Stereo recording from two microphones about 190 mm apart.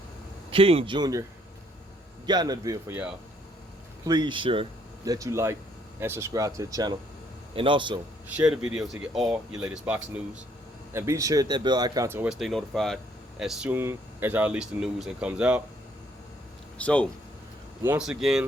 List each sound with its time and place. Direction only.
0.5 s speech: 30° right (ahead or behind)
2.2 s speech: 20° right (ahead or behind)
8.3 s speech: 5° right (ahead or behind)
16.7 s speech: 5° left (ahead or behind)
17.8 s speech: 5° right (ahead or behind)